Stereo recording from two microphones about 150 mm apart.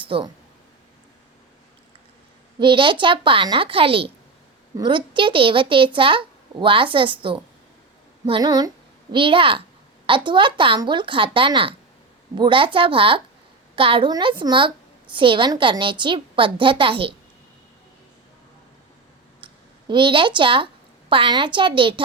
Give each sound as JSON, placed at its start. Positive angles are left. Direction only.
{"t": 0.0, "sound": "speech", "side_deg": -35}
{"t": 2.6, "sound": "speech", "side_deg": -35}
{"t": 19.4, "sound": "a sound", "side_deg": -35}
{"t": 19.9, "sound": "speech", "side_deg": -35}